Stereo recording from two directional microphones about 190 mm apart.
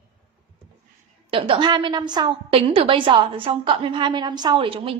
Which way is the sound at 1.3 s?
30° right (ahead or behind).